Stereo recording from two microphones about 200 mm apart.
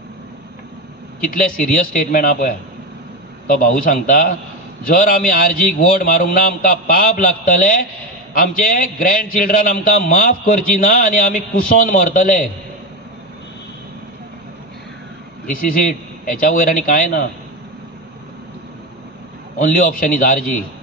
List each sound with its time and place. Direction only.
1.3 s a man's voice: 45° left (ahead or behind)
15.4 s a man's voice: 45° left (ahead or behind)
19.6 s a man's voice: 45° left (ahead or behind)